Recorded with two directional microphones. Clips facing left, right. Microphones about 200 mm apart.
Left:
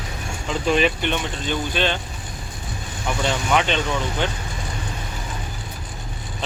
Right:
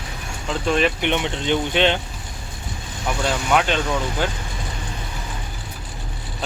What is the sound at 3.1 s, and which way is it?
Speech, 5° right (ahead or behind).